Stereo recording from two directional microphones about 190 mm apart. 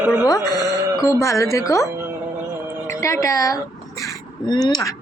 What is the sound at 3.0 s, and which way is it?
Speech, 15° left (ahead or behind).